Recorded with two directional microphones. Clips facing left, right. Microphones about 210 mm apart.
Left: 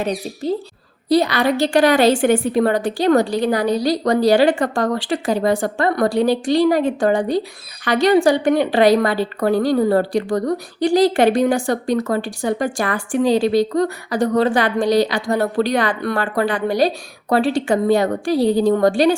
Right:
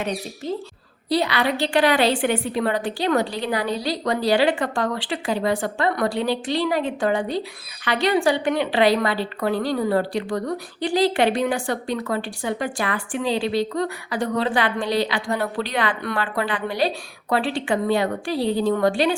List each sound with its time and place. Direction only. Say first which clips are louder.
0.0 s a woman's voice: left 5 dB; 35° left (ahead or behind)